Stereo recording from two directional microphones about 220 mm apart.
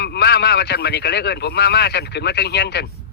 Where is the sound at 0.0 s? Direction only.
50° left (ahead or behind).